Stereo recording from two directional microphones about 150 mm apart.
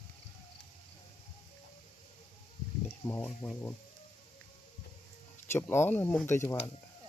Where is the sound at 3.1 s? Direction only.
10° left (ahead or behind).